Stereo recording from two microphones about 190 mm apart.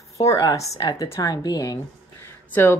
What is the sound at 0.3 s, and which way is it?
A woman's voice, 20° left (ahead or behind).